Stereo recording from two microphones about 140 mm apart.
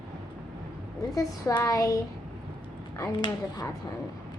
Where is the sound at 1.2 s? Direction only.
25° left (ahead or behind).